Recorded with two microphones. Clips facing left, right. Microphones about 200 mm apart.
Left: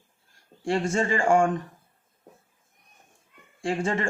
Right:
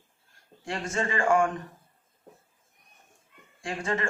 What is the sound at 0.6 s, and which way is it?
Speech, 30° left (ahead or behind).